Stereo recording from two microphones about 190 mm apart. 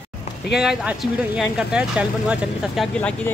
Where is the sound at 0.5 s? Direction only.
5° right (ahead or behind).